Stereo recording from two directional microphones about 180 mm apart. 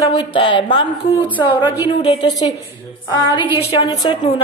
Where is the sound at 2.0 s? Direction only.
35° left (ahead or behind).